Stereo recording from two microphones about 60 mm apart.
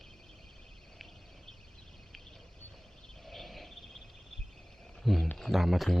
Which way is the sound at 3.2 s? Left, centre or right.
Centre.